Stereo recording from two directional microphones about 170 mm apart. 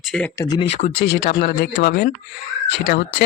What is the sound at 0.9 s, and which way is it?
Speech, 70° left (ahead or behind).